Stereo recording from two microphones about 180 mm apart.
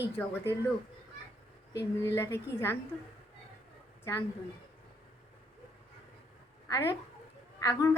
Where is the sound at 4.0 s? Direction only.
15° left (ahead or behind).